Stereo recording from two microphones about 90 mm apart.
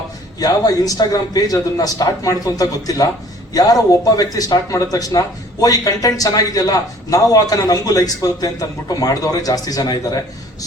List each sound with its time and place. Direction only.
0.3 s speech: 45° left (ahead or behind)